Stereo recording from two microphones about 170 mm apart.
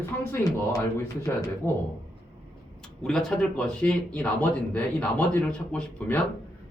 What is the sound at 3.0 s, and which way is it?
Speech, 5° left (ahead or behind).